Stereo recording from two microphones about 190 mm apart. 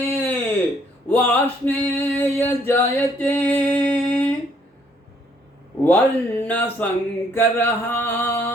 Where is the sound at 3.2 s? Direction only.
10° left (ahead or behind).